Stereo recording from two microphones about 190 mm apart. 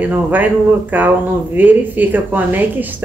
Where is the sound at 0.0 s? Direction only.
10° right (ahead or behind).